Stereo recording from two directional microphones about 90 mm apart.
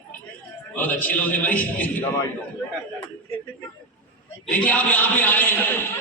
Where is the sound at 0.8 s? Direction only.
20° left (ahead or behind).